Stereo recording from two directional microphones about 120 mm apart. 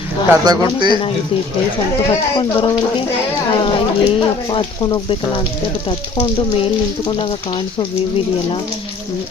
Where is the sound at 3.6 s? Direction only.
45° left (ahead or behind).